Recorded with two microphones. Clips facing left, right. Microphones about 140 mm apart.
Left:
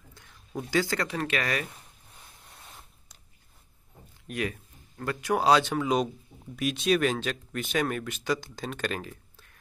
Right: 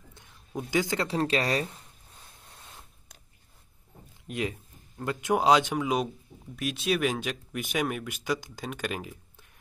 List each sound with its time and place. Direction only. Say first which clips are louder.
0.6 s speech: even; 15° right (ahead or behind)
4.3 s speech: even; 20° right (ahead or behind)
6.4 s speech: left 3 dB; centre (ahead or behind); by 9.6 s 15° right (ahead or behind)